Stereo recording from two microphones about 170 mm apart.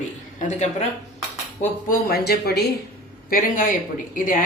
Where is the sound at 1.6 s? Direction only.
55° left (ahead or behind).